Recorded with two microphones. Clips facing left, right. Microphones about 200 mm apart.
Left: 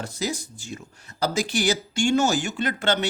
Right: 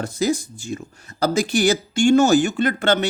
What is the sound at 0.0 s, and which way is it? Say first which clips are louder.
Speech: right 8 dB; 50° right (ahead or behind).